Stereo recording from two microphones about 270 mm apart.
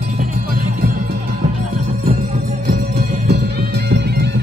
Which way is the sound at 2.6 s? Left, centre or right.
Right.